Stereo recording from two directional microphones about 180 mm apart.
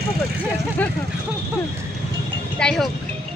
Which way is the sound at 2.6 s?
5° left (ahead or behind).